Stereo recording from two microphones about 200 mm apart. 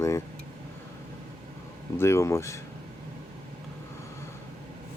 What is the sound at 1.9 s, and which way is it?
Speech, 15° left (ahead or behind).